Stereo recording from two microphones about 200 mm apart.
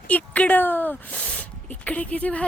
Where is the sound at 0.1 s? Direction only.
5° left (ahead or behind).